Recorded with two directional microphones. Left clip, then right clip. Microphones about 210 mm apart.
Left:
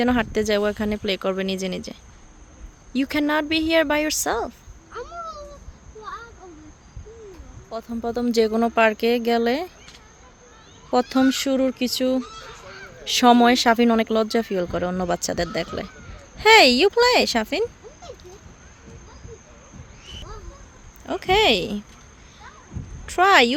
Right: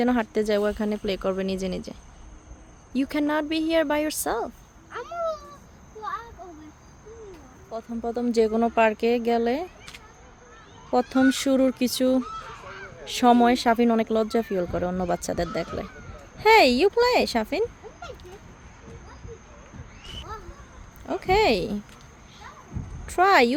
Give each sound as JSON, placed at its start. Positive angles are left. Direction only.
{"t": 0.0, "sound": "speech", "side_deg": 5}
{"t": 4.9, "sound": "a sound", "side_deg": -5}
{"t": 7.7, "sound": "speech", "side_deg": 10}
{"t": 10.9, "sound": "speech", "side_deg": 5}
{"t": 11.3, "sound": "speech", "side_deg": -10}
{"t": 12.2, "sound": "honk", "side_deg": 50}
{"t": 13.1, "sound": "speech", "side_deg": 5}
{"t": 21.1, "sound": "speech", "side_deg": 0}
{"t": 23.0, "sound": "speech", "side_deg": 0}